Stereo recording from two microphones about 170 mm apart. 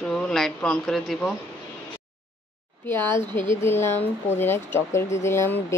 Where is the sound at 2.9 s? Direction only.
15° left (ahead or behind).